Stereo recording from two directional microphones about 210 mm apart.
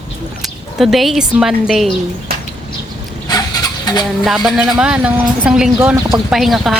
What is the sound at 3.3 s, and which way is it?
Chicken, 20° left (ahead or behind).